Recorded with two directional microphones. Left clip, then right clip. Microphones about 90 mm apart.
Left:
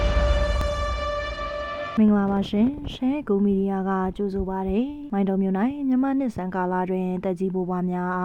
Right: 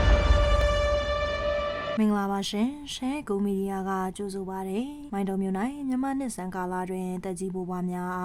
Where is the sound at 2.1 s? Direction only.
35° left (ahead or behind).